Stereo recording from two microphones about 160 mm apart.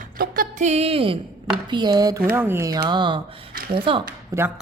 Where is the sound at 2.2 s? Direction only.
10° right (ahead or behind).